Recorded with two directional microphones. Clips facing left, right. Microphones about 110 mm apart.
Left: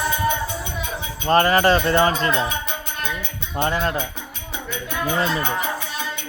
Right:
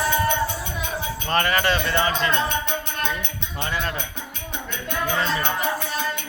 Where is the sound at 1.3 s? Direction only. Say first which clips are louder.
Left 6 dB; 35° left (ahead or behind).